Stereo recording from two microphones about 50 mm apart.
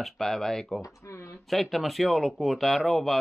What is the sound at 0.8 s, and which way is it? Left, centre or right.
Speech, left.